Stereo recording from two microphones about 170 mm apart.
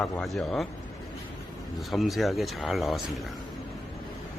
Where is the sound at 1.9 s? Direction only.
Centre (ahead or behind).